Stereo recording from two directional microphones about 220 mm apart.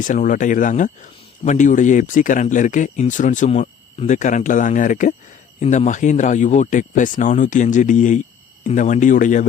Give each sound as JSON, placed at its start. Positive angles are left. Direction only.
{"t": 0.0, "sound": "speech", "side_deg": 35}